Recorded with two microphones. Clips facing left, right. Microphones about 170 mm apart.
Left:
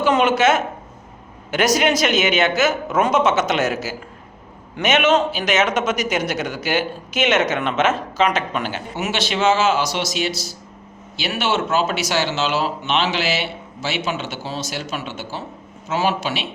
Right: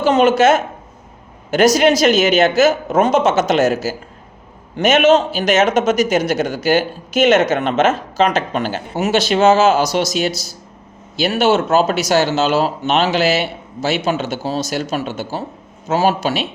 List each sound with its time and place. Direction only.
0.0 s a man's voice: 40° right (ahead or behind)
4.8 s a man's voice: 45° right (ahead or behind)